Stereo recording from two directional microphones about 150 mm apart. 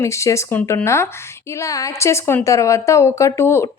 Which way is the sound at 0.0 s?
20° left (ahead or behind).